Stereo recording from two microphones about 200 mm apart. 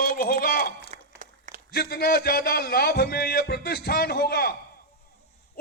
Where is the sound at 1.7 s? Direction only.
50° left (ahead or behind).